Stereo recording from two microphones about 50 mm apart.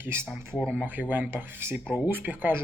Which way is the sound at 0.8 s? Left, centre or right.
Right.